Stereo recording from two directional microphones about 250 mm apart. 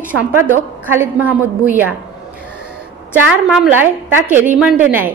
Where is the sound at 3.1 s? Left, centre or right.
Centre.